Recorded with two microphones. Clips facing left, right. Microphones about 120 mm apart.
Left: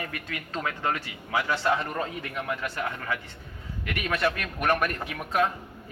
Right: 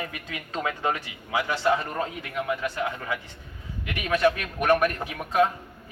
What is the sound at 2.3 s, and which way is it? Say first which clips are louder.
Speech: right 5 dB; 10° right (ahead or behind).